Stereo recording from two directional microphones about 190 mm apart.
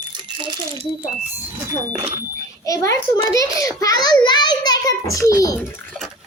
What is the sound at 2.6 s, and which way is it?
A child's voice, 15° left (ahead or behind).